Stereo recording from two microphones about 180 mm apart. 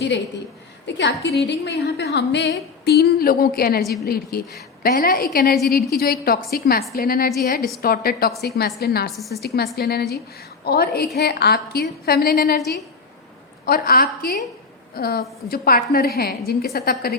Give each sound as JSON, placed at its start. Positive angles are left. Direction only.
{"t": 0.9, "sound": "a woman's voice", "side_deg": 85}
{"t": 9.0, "sound": "a woman's voice", "side_deg": 0}
{"t": 9.7, "sound": "a woman's voice", "side_deg": 60}